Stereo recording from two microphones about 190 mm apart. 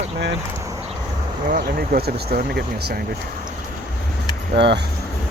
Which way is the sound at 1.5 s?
50° right (ahead or behind).